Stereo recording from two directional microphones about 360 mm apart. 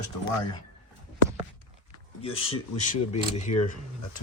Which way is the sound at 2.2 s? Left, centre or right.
Centre.